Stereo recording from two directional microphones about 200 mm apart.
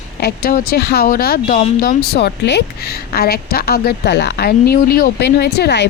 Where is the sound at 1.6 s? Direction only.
35° left (ahead or behind).